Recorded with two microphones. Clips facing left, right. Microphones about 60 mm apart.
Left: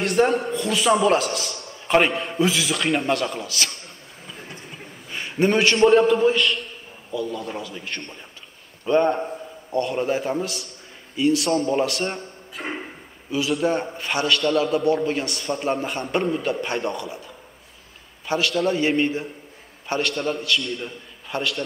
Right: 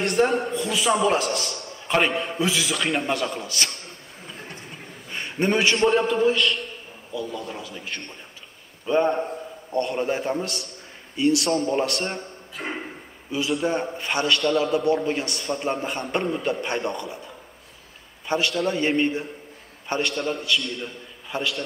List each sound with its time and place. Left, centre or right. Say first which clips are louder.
0.0 s a man's voice: left 2 dB; centre
4.3 s a sound: even; centre
5.8 s a man's voice: left 5 dB; centre
10.4 s a man's voice: left 1 dB; right
11.5 s a man's voice: left 2 dB; centre
18.5 s a man's voice: left 2 dB; centre